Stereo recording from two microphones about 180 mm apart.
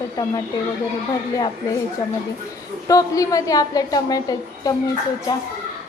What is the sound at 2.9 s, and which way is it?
A woman's voice, 20° left (ahead or behind).